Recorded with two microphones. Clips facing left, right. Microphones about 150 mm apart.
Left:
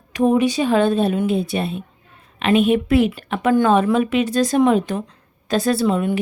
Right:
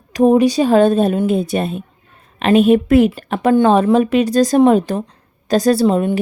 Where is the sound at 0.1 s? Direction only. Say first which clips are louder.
Right 5 dB; 40° right (ahead or behind).